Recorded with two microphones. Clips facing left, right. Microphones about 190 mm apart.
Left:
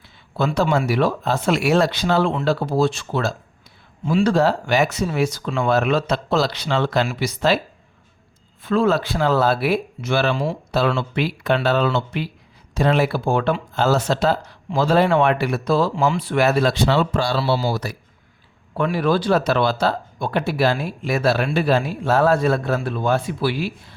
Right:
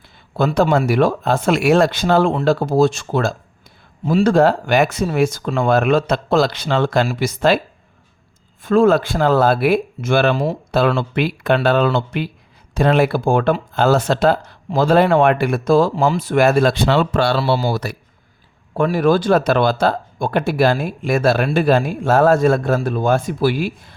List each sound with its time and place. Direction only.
0.3 s speech: 50° right (ahead or behind)
8.6 s speech: 50° right (ahead or behind)
18.7 s speech: 45° right (ahead or behind)